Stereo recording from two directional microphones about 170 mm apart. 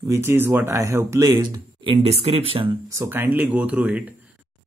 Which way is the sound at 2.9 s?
15° right (ahead or behind).